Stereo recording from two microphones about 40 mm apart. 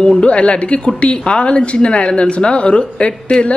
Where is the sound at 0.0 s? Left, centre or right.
Left.